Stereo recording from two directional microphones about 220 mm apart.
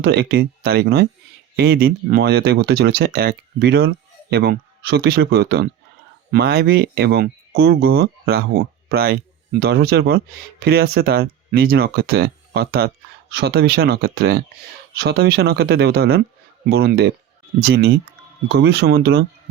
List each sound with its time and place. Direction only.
0.0 s speech: 50° right (ahead or behind)